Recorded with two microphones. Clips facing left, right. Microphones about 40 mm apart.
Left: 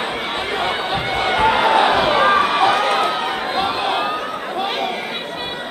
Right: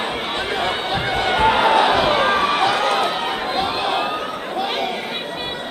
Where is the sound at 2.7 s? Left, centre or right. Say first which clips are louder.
Left 2 dB; centre.